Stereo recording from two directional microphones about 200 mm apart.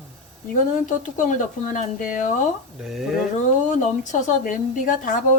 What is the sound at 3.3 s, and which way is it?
Speech, 40° left (ahead or behind).